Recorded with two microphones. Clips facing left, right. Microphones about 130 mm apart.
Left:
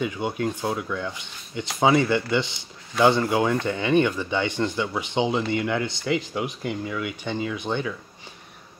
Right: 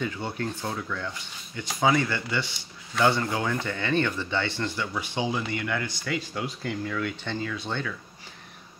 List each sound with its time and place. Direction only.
0.0 s speech: 15° left (ahead or behind)